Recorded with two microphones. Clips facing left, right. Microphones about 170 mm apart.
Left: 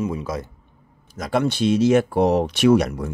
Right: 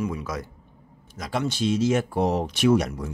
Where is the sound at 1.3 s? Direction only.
60° left (ahead or behind).